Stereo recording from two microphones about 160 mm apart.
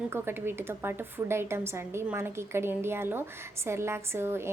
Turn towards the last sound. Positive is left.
turn(degrees=-15)  # may be behind; listen again after turning